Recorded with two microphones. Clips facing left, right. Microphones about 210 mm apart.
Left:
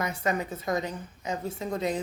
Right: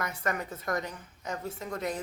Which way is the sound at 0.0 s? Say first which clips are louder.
Left 4 dB; 25° left (ahead or behind).